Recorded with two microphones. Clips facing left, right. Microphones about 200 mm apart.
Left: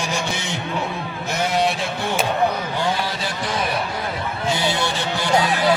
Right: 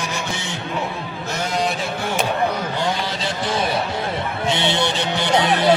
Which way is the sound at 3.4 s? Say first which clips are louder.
Right 2 dB; 25° right (ahead or behind).